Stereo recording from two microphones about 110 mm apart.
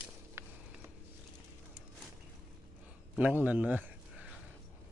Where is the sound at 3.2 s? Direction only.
15° right (ahead or behind).